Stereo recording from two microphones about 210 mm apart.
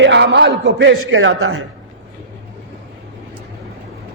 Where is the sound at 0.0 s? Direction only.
60° right (ahead or behind); by 1.6 s 75° right (ahead or behind).